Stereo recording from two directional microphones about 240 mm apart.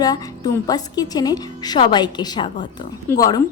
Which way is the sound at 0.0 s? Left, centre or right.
Centre.